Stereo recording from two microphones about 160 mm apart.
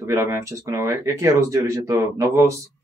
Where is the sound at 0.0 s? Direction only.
20° right (ahead or behind).